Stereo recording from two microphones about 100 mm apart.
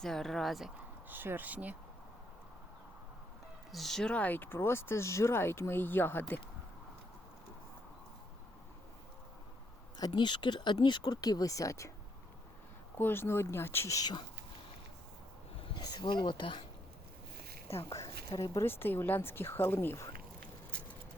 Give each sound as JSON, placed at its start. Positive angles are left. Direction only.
{"t": 0.0, "sound": "speech", "side_deg": 5}
{"t": 0.8, "sound": "speech", "side_deg": -20}
{"t": 3.7, "sound": "speech", "side_deg": 0}
{"t": 10.1, "sound": "speech", "side_deg": 50}
{"t": 13.0, "sound": "speech", "side_deg": 20}
{"t": 15.8, "sound": "speech", "side_deg": 45}
{"t": 17.8, "sound": "a woman's voice", "side_deg": 30}